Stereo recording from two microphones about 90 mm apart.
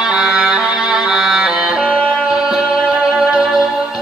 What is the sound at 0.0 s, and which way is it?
Music, 10° right (ahead or behind).